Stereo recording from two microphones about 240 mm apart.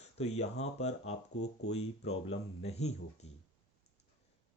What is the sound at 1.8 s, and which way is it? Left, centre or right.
Speech, left.